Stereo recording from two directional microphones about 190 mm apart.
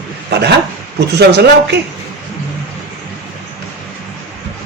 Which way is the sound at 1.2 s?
60° right (ahead or behind).